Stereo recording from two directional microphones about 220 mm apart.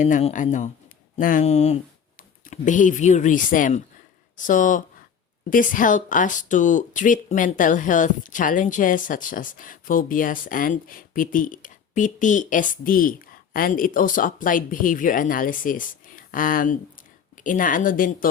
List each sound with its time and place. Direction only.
0.0 s speech: 30° left (ahead or behind)